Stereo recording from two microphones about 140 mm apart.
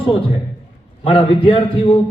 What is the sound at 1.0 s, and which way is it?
Speech, 40° left (ahead or behind).